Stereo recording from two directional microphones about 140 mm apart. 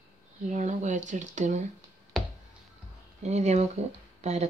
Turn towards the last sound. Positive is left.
turn(degrees=-55)  # may be behind; listen again after turning